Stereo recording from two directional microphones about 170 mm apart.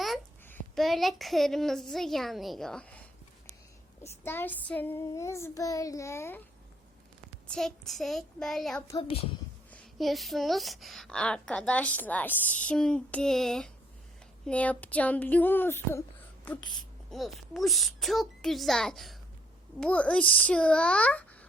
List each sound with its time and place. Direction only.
0.8 s a woman's voice: centre (ahead or behind)
4.0 s child singing: 15° left (ahead or behind)
7.4 s a woman's voice: 5° left (ahead or behind)
8.9 s a woman's voice: 30° left (ahead or behind)
9.7 s a woman's voice: centre (ahead or behind)
14.4 s child singing: 10° left (ahead or behind)
17.1 s a woman's voice: centre (ahead or behind)
19.8 s child singing: 5° left (ahead or behind)